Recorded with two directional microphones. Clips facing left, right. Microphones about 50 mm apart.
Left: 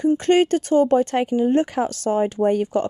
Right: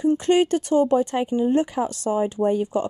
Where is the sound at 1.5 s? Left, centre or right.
Left.